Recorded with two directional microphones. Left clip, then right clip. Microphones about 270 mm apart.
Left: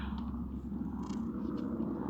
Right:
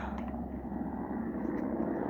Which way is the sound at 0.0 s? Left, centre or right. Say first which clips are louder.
Right 4 dB; centre.